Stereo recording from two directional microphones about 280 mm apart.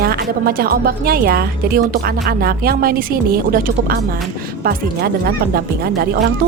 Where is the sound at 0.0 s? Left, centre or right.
Right.